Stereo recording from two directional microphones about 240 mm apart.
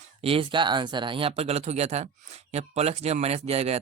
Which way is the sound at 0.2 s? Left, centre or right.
Right.